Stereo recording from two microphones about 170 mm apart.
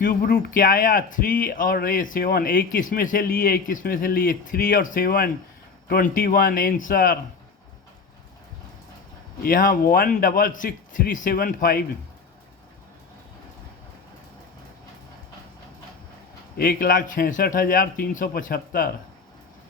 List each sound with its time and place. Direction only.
0.0 s speech: 55° left (ahead or behind)
9.4 s speech: 55° left (ahead or behind)
16.6 s speech: 65° left (ahead or behind)